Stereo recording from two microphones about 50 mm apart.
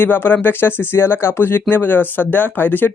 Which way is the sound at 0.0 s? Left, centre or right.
Left.